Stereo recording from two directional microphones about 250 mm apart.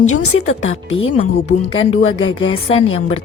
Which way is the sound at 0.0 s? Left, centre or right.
Left.